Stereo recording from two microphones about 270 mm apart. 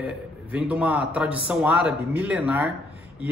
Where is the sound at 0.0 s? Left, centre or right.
Centre.